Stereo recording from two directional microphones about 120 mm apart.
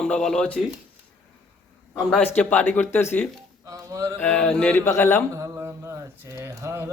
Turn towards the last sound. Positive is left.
turn(degrees=-20)  # may be behind; listen again after turning